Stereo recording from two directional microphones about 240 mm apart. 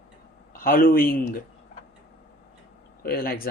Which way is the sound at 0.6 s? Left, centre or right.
Left.